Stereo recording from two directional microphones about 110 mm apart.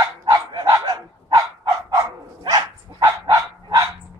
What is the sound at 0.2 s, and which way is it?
Dog, 45° right (ahead or behind).